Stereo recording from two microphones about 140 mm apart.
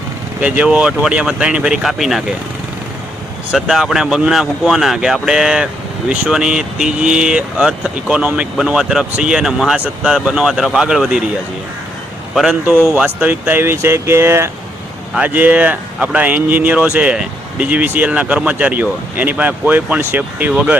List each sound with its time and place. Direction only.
0.4 s speech: 10° right (ahead or behind)
3.5 s speech: 5° right (ahead or behind)
12.3 s speech: 5° right (ahead or behind)